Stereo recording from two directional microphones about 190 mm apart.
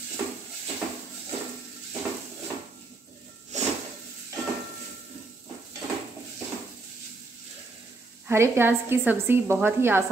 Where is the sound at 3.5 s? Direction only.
40° right (ahead or behind).